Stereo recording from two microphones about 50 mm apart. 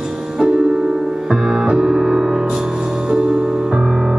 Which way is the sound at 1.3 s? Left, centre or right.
Centre.